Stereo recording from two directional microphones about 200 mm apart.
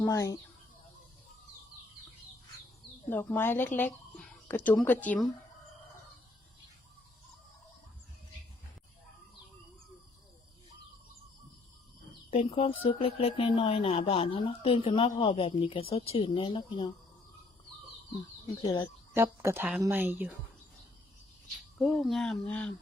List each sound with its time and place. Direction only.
0.0 s speech: 15° left (ahead or behind)
3.1 s speech: 10° left (ahead or behind)
12.3 s speech: 30° left (ahead or behind)
18.2 s speech: 20° left (ahead or behind)
19.1 s speech: 15° right (ahead or behind)
21.8 s speech: centre (ahead or behind)